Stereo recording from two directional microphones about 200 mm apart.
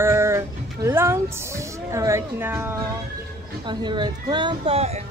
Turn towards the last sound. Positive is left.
turn(degrees=-30)  # may be behind; listen again after turning